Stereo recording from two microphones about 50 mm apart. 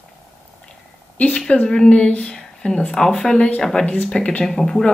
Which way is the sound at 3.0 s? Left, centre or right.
Centre.